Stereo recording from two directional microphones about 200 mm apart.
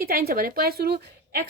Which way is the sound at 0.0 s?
50° right (ahead or behind).